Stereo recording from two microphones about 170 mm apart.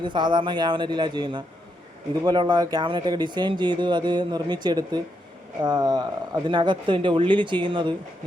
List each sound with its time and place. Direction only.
0.0 s speech: 25° right (ahead or behind)